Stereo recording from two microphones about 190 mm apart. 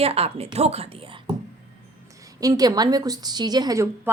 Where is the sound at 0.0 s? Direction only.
30° right (ahead or behind).